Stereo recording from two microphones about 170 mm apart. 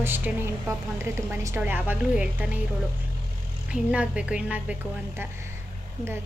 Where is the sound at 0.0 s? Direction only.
10° right (ahead or behind).